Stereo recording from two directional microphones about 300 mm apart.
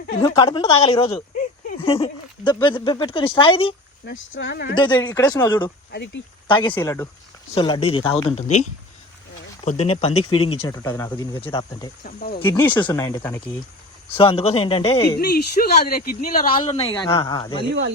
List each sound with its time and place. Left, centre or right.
0.2 s speech: centre
4.4 s speech: left
4.7 s speech: centre
5.9 s speech: left
6.5 s speech: centre
9.6 s speech: left
12.0 s speech: left
12.4 s speech: centre
15.6 s speech: left
16.5 s speech: centre